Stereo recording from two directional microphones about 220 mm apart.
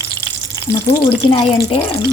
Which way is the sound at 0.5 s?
15° left (ahead or behind).